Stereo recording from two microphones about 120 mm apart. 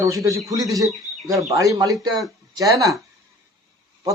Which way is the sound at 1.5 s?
30° right (ahead or behind).